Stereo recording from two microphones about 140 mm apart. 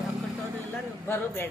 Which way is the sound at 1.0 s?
15° left (ahead or behind).